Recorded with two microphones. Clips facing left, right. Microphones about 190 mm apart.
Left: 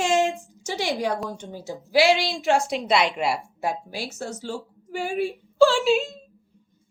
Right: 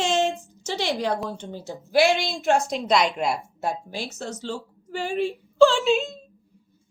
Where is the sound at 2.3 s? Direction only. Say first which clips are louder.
Even; centre (ahead or behind).